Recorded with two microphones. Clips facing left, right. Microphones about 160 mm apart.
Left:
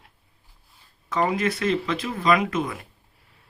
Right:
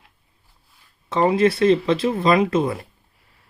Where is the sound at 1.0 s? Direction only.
30° right (ahead or behind).